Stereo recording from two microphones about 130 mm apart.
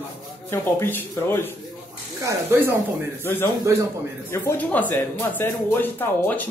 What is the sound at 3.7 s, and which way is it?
Speech, 25° right (ahead or behind).